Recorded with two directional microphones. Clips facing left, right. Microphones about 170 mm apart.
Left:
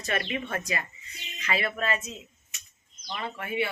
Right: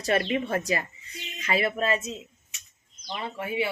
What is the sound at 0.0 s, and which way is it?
Speech, 35° right (ahead or behind).